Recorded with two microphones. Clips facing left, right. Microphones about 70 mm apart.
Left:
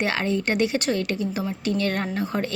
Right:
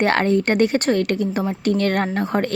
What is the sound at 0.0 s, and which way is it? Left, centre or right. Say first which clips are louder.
A woman's voice: right 7 dB; right.